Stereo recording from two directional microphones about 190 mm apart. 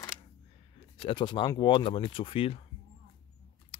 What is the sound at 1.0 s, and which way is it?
Speech, 25° left (ahead or behind).